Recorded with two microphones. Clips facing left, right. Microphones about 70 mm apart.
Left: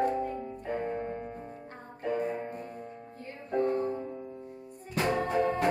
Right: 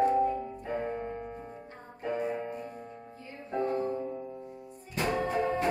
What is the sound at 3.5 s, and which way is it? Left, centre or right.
Music, left.